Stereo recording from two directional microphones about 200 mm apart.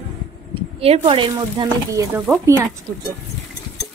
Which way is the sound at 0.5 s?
30° right (ahead or behind).